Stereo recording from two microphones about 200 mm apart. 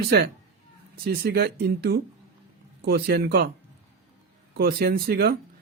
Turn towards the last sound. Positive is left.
turn(degrees=-50)  # may be behind; listen again after turning